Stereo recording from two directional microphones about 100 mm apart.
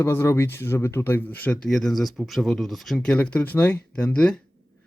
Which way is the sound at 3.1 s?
15° left (ahead or behind).